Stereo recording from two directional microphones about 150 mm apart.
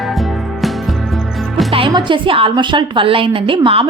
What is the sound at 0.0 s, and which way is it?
Music, centre (ahead or behind).